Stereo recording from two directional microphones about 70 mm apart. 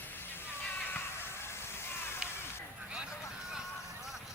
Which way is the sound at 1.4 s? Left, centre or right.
Left.